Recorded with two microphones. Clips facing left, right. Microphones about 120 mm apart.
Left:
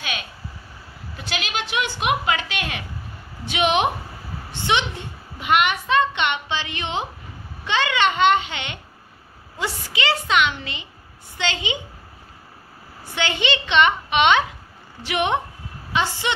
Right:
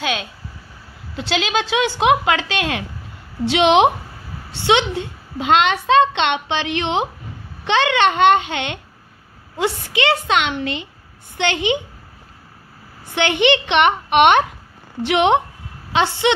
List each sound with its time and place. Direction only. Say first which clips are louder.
0.0 s a sound: right 8 dB; 90° right
1.3 s a woman's voice: right 7 dB; 90° right
7.6 s a woman's voice: right 5 dB; 65° right (ahead or behind)
13.1 s a woman's voice: right 7 dB; 65° right (ahead or behind)
15.0 s a woman's voice: right 7 dB; 70° right (ahead or behind)
16.2 s a child's voice: right 8 dB; 85° right